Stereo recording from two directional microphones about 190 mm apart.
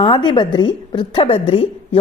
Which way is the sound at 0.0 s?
25° left (ahead or behind).